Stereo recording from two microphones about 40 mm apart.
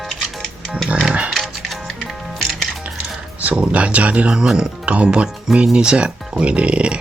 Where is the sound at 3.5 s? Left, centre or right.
Right.